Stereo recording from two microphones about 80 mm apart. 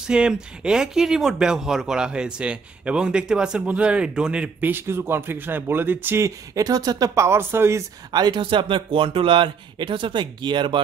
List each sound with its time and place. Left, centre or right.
0.0 s speech: centre; by 6.2 s right
6.2 s speech: right
7.2 s speech: right
8.1 s speech: right